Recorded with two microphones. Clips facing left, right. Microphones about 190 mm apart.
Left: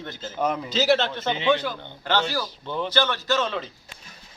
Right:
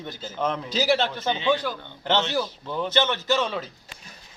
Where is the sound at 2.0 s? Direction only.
25° right (ahead or behind).